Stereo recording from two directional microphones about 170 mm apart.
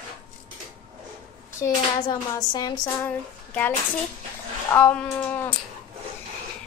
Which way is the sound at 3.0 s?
10° left (ahead or behind).